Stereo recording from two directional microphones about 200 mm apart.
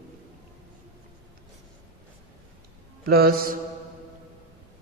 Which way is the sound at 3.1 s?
50° right (ahead or behind).